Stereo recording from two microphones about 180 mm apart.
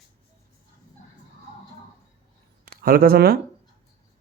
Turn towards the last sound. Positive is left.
turn(degrees=-60)  # may be behind; listen again after turning